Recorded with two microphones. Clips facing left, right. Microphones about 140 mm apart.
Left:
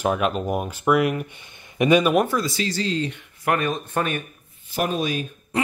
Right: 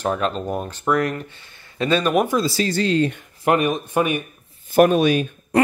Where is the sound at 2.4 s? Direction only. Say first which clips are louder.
Right 4 dB; 35° right (ahead or behind).